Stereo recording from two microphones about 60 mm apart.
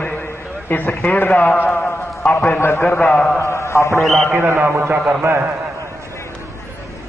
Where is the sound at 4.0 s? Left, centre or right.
Centre.